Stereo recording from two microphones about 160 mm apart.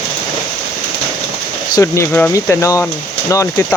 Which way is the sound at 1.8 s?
15° left (ahead or behind).